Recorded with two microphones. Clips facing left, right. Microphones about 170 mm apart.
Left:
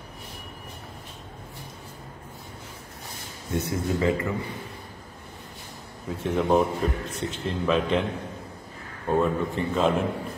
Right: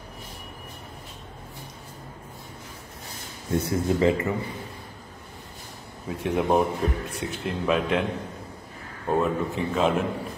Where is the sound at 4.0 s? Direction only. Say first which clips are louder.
Right 2 dB; 25° right (ahead or behind).